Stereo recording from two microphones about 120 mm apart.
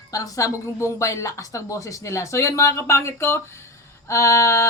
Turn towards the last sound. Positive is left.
turn(degrees=25)  # may be behind; listen again after turning